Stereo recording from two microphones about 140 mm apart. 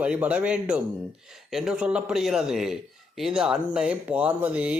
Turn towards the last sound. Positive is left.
turn(degrees=-10)  # may be behind; listen again after turning